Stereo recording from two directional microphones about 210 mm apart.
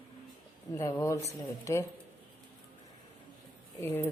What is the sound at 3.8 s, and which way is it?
Speech, 10° left (ahead or behind).